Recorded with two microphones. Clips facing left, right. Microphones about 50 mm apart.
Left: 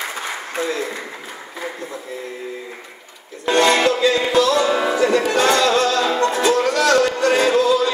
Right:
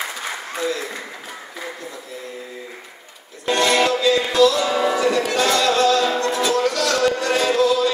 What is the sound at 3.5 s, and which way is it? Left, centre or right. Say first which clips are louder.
Music: left 2 dB; left.